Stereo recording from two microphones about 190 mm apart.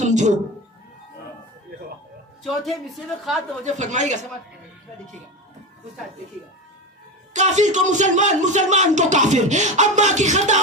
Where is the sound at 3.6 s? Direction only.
40° right (ahead or behind).